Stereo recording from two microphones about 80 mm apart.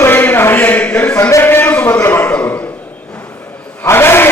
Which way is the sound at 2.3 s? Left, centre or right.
Centre.